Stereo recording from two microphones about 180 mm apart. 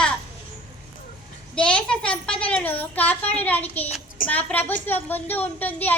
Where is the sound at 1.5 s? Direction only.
5° left (ahead or behind).